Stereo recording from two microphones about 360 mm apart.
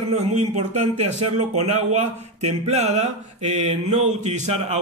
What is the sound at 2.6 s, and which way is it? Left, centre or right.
A man's voice, centre.